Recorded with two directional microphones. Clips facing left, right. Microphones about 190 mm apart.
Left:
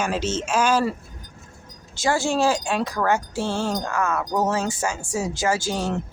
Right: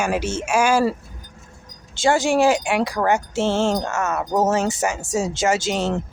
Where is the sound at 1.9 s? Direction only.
25° right (ahead or behind).